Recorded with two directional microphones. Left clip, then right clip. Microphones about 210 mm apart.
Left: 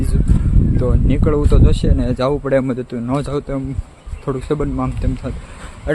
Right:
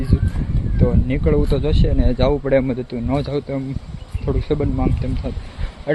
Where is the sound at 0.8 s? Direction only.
10° left (ahead or behind).